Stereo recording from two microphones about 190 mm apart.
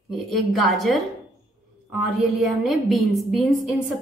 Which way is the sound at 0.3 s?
Centre (ahead or behind).